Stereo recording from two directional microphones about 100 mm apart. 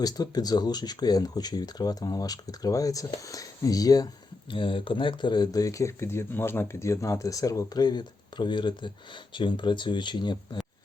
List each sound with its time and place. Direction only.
0.0 s speech: 40° left (ahead or behind)
4.4 s speech: 55° left (ahead or behind)